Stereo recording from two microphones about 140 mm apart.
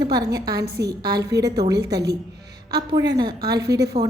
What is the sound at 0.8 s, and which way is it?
Speech, 30° right (ahead or behind).